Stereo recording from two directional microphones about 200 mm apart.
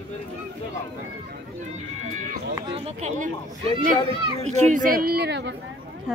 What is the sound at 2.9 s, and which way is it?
Speech, 35° right (ahead or behind).